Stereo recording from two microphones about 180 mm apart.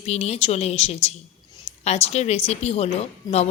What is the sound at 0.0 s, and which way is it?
A woman's voice, 35° left (ahead or behind).